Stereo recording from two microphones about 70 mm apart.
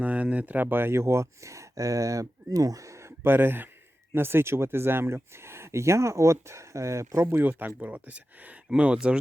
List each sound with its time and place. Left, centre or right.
0.0 s speech: centre